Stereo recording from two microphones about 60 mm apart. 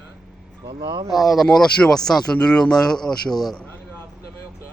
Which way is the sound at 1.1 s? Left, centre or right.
Centre.